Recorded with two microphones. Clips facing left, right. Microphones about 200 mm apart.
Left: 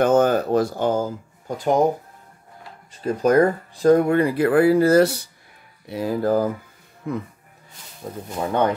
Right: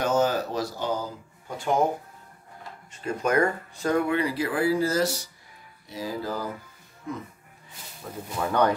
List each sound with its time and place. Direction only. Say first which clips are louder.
0.0 s speech: left 7 dB; 55° left (ahead or behind)
2.9 s speech: left 7 dB; 35° left (ahead or behind); by 7.2 s 60° left (ahead or behind)
8.0 s speech: left 3 dB; 30° left (ahead or behind)